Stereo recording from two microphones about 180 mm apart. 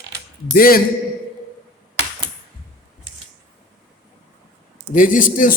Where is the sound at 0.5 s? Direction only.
55° left (ahead or behind).